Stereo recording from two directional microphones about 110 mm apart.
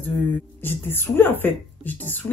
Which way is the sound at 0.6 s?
20° left (ahead or behind).